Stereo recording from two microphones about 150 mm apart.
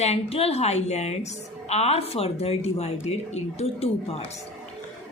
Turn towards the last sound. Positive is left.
turn(degrees=45)  # may be behind; listen again after turning